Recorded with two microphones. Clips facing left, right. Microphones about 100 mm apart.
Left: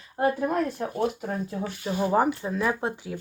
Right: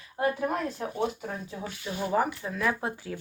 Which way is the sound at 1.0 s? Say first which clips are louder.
Left 4 dB; 50° left (ahead or behind).